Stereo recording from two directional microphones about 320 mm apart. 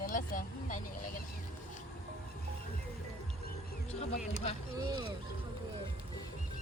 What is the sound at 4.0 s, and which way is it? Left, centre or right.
Speech, centre.